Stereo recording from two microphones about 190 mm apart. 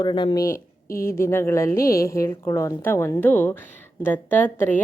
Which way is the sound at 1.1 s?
15° left (ahead or behind).